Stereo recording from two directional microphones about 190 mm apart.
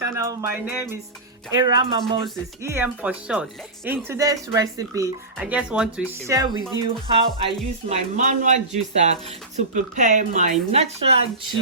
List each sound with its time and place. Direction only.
0.0 s speech: 15° right (ahead or behind)
1.6 s speech: 25° right (ahead or behind)
2.6 s speech: 15° right (ahead or behind)
5.4 s speech: 5° right (ahead or behind)
6.2 s speech: 20° right (ahead or behind)
6.6 s speech: 20° left (ahead or behind)
6.8 s speech: 30° right (ahead or behind)